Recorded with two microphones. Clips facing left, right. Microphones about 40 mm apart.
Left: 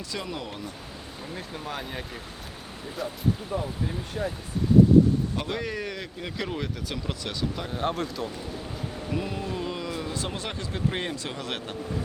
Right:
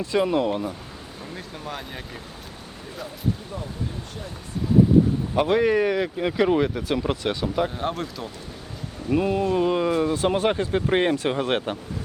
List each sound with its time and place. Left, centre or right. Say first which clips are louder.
0.0 s speech: right 12 dB; right
1.4 s speech: even; centre
5.3 s speech: right 11 dB; right
7.8 s speech: even; centre
9.1 s speech: right 11 dB; right